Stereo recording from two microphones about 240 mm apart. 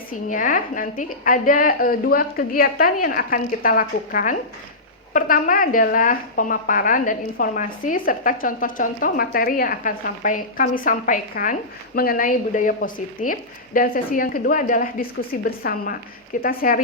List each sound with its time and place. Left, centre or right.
0.1 s a woman's voice: left